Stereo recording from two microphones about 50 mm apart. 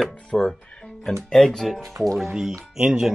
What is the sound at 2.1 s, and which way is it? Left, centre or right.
Speech, centre.